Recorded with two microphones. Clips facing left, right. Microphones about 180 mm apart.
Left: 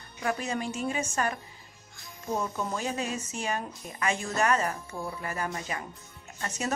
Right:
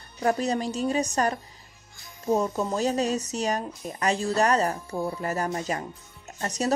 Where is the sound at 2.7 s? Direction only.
40° right (ahead or behind).